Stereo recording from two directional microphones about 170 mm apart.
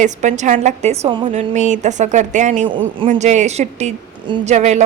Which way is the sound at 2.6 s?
30° right (ahead or behind).